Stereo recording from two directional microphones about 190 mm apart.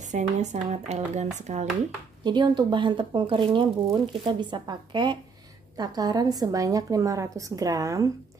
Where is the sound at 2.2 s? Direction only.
25° right (ahead or behind).